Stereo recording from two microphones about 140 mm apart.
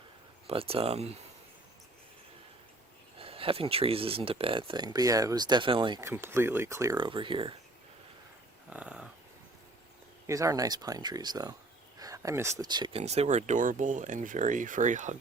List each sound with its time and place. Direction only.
0.4 s speech: 40° right (ahead or behind)
3.2 s speech: 40° right (ahead or behind)
6.0 s speech: 20° right (ahead or behind)
6.9 s speech: 35° right (ahead or behind)
8.7 s speech: 10° right (ahead or behind)
10.2 s speech: 25° right (ahead or behind)
11.9 s a sound: 25° right (ahead or behind)
12.6 s speech: 30° right (ahead or behind)
13.0 s speech: 50° right (ahead or behind)